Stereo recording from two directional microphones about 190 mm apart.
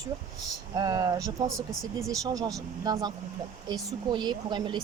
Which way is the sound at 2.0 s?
20° right (ahead or behind).